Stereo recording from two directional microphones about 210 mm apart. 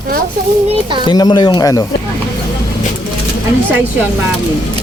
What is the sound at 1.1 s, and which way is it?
Speech, 20° left (ahead or behind).